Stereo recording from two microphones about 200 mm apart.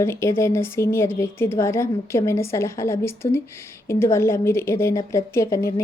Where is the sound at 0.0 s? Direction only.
15° left (ahead or behind).